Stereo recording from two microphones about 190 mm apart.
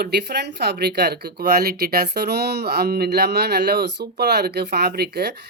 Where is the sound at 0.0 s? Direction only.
60° right (ahead or behind).